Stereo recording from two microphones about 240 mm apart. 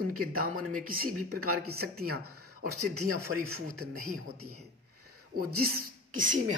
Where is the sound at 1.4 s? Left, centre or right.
Right.